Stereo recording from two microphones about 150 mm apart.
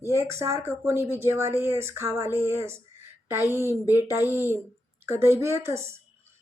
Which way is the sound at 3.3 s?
15° right (ahead or behind).